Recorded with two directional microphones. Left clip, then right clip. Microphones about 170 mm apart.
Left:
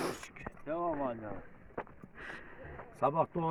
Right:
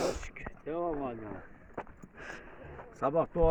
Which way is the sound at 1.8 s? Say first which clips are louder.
Even; 90° right.